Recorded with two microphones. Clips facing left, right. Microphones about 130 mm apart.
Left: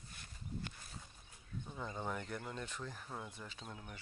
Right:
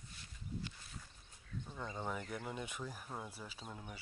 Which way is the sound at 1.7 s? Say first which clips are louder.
Even; centre (ahead or behind).